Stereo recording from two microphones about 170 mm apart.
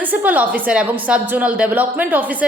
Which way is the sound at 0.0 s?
10° right (ahead or behind).